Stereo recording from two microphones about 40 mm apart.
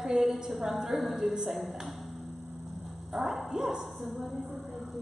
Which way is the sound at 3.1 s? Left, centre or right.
Centre.